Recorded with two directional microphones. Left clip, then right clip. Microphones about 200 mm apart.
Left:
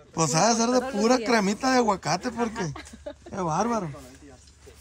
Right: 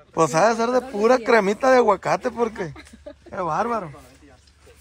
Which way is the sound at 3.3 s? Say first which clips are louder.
Right 3 dB; 15° left (ahead or behind).